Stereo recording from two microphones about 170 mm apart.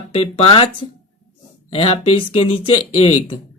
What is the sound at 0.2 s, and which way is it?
Speech, 35° left (ahead or behind).